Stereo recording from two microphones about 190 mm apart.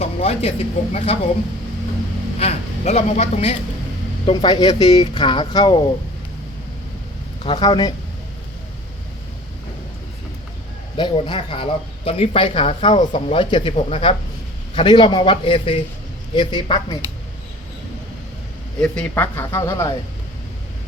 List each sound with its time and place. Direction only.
0.0 s speech: 30° left (ahead or behind)
2.4 s a man's voice: 35° left (ahead or behind)
4.3 s speech: 20° left (ahead or behind)
7.4 s speech: 25° left (ahead or behind)
10.9 s speech: 25° left (ahead or behind)
18.8 s speech: 5° left (ahead or behind)